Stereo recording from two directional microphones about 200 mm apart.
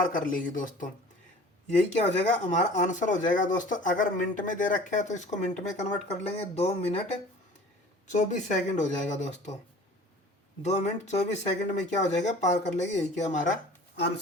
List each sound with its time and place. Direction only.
0.1 s speech: 45° left (ahead or behind)
10.6 s speech: 35° left (ahead or behind)